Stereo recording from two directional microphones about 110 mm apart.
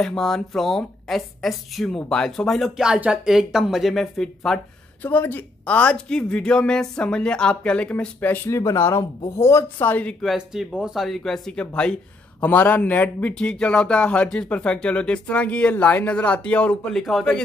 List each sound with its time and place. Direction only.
0.0 s speech: 5° left (ahead or behind)
5.0 s a woman's voice: 15° left (ahead or behind)
10.2 s speech: 5° right (ahead or behind)
17.0 s speech: centre (ahead or behind)